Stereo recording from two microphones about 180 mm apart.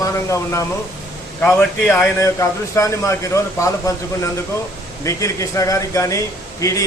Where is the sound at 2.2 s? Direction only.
15° left (ahead or behind).